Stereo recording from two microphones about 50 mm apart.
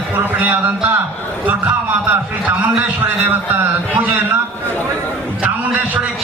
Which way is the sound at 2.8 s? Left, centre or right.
Right.